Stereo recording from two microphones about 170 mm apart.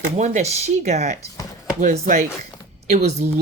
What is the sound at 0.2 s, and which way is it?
Speech, 40° right (ahead or behind).